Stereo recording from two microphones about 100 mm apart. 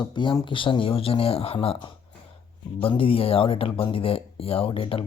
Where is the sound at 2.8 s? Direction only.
70° left (ahead or behind).